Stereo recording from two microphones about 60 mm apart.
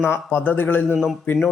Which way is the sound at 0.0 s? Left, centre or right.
Left.